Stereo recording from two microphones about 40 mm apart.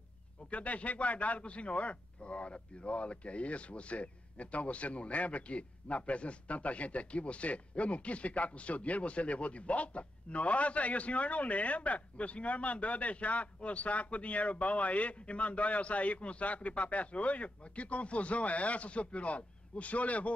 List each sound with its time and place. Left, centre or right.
0.5 s speech: left